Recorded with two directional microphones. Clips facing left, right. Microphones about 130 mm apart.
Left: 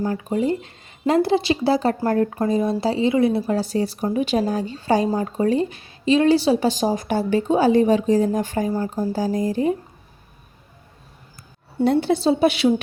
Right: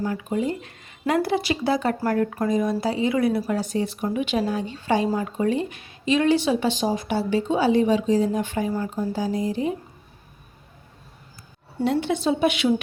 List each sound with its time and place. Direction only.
0.0 s speech: 35° left (ahead or behind)
11.9 s speech: 35° left (ahead or behind)